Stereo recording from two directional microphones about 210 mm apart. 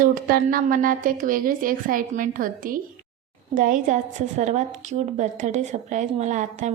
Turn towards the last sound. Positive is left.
turn(degrees=-35)  # may be behind; listen again after turning